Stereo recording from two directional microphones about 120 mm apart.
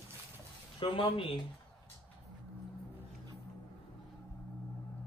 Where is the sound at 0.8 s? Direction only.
45° left (ahead or behind).